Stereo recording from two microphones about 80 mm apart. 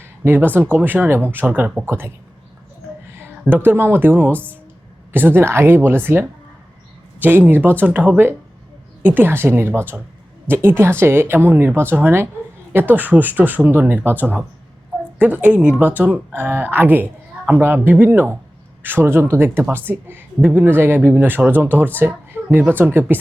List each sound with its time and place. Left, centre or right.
0.0 s speech: right
1.9 s speech: right
3.1 s a sound: right
3.6 s speech: right